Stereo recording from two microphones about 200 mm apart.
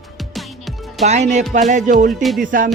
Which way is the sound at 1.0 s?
35° right (ahead or behind).